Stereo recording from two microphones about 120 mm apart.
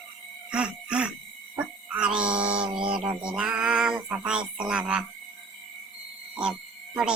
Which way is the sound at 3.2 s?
10° right (ahead or behind).